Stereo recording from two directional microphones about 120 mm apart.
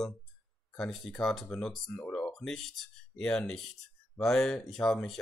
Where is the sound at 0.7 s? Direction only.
5° left (ahead or behind).